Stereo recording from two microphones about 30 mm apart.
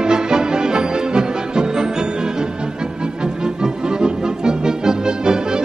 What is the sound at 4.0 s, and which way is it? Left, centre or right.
Music, right.